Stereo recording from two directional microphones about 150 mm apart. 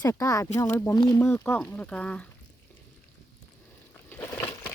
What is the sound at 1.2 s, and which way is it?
Speech, 15° left (ahead or behind).